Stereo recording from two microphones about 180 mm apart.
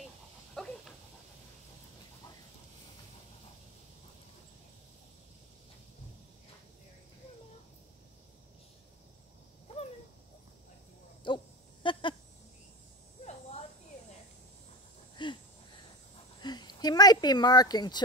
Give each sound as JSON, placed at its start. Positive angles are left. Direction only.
{"t": 0.6, "sound": "dog", "side_deg": 5}
{"t": 11.2, "sound": "goat", "side_deg": 25}
{"t": 13.2, "sound": "buzz", "side_deg": 40}
{"t": 15.2, "sound": "a sound", "side_deg": 25}
{"t": 16.3, "sound": "speech", "side_deg": 25}